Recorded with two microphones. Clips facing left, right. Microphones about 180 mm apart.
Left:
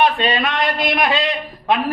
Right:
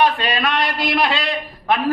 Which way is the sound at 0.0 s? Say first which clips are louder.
Left 1 dB; 25° left (ahead or behind).